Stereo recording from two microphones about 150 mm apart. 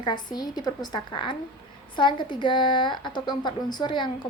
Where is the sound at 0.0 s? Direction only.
30° left (ahead or behind).